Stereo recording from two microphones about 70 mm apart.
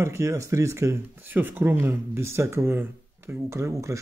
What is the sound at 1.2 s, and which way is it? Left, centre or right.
Speech, right.